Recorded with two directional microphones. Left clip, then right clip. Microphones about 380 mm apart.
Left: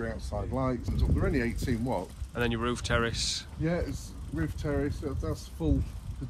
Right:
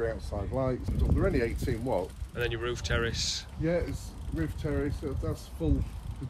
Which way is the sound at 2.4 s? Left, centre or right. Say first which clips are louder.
Left 2 dB; centre.